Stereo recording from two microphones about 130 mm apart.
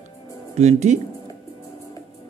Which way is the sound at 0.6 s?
60° right (ahead or behind).